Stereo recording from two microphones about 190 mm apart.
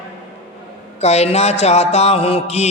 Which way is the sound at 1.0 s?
35° left (ahead or behind).